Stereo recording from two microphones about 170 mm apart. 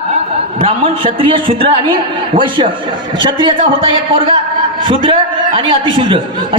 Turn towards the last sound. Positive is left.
turn(degrees=-30)  # may be behind; listen again after turning